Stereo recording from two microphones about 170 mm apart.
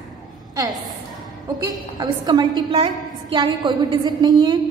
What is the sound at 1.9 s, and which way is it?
A woman's voice, 25° right (ahead or behind).